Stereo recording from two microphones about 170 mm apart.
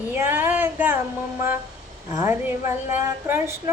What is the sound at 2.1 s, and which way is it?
Speech, 10° right (ahead or behind).